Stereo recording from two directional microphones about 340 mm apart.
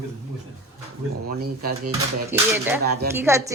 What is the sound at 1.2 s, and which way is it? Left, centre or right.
Speech, right.